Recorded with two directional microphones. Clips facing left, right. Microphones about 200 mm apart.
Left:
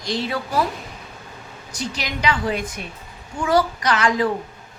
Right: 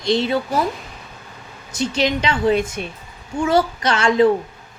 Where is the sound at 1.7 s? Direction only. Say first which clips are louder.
Right 9 dB; 25° right (ahead or behind).